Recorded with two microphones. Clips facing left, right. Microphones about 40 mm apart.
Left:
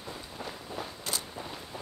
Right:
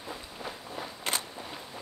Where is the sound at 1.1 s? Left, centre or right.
Right.